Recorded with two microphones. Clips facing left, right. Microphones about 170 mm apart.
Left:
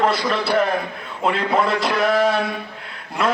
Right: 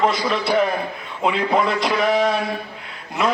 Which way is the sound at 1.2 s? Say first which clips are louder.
Even; centre (ahead or behind).